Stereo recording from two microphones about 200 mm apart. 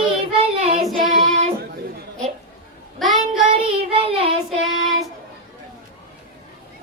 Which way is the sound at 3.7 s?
25° right (ahead or behind).